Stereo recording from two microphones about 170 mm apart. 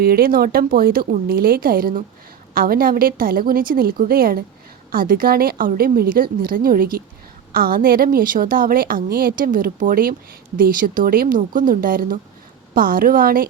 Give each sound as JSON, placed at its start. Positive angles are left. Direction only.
{"t": 0.0, "sound": "a woman's voice", "side_deg": -60}